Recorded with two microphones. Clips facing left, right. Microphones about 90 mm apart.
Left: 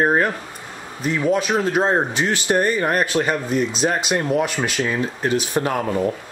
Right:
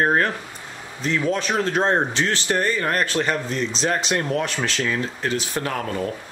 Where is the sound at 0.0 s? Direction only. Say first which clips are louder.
Left 2 dB; 10° left (ahead or behind).